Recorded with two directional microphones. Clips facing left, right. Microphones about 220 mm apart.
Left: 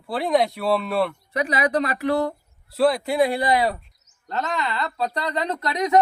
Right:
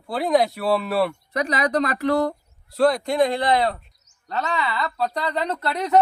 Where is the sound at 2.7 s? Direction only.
5° left (ahead or behind).